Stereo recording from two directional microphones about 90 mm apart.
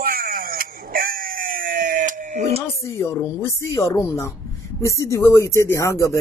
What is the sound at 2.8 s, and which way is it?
Speech, 35° left (ahead or behind).